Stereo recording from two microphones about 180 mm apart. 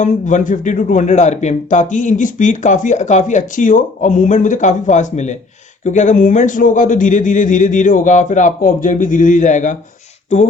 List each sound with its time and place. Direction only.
0.0 s speech: 45° left (ahead or behind)